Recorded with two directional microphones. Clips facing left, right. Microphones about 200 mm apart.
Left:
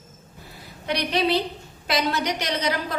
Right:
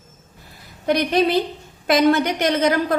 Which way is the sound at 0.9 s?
50° right (ahead or behind).